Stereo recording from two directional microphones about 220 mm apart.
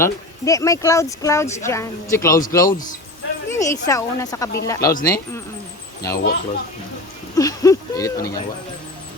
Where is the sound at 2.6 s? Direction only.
35° left (ahead or behind).